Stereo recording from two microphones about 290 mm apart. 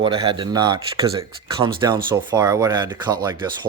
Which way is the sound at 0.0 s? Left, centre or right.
Centre.